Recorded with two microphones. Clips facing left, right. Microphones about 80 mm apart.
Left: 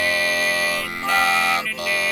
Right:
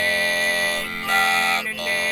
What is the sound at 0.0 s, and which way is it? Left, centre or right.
Music, centre.